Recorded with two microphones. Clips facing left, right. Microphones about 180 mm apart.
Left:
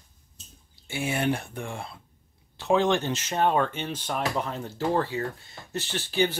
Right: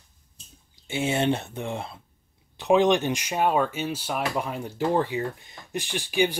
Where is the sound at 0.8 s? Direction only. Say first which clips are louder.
Right 3 dB; 20° right (ahead or behind).